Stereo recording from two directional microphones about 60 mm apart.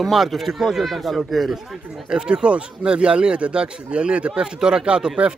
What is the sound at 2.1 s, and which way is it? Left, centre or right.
Speech, centre.